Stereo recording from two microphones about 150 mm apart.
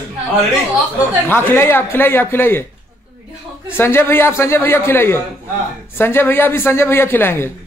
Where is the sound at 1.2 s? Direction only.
15° left (ahead or behind).